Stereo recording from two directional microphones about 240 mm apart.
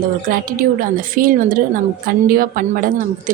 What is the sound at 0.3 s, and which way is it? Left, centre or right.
A woman's voice, right.